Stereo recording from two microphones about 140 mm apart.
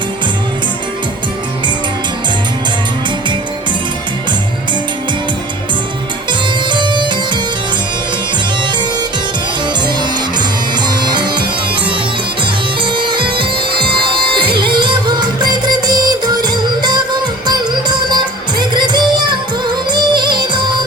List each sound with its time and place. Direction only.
6.7 s music: 35° right (ahead or behind)
10.8 s music: 30° right (ahead or behind)
12.8 s bagpipes: 35° right (ahead or behind)
14.3 s music: 35° right (ahead or behind)